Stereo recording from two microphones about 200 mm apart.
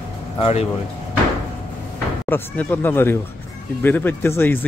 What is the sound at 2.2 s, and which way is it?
Speech, 10° left (ahead or behind).